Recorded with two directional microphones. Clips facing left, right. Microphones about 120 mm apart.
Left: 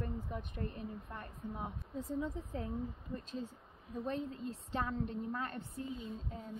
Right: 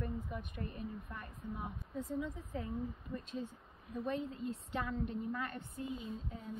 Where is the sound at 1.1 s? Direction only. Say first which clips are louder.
Left 1 dB; 40° left (ahead or behind).